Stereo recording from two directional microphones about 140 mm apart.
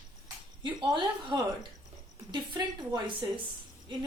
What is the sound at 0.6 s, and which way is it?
A woman's voice, 35° right (ahead or behind).